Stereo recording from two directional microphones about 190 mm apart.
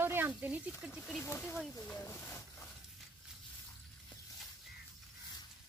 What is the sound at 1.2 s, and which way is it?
Speech, 15° left (ahead or behind).